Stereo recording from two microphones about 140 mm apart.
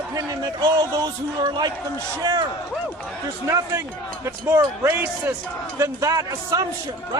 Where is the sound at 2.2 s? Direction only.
25° right (ahead or behind).